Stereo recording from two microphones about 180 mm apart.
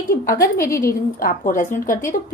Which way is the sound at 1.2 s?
50° left (ahead or behind).